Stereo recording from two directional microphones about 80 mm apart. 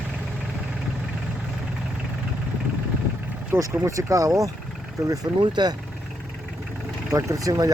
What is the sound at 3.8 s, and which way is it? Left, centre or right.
Speech, right.